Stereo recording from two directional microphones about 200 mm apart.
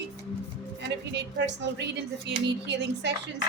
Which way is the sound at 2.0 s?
60° right (ahead or behind).